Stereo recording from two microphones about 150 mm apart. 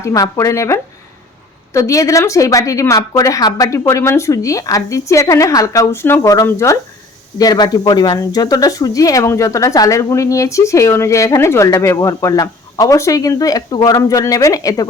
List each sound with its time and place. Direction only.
0.0 s speech: 20° left (ahead or behind)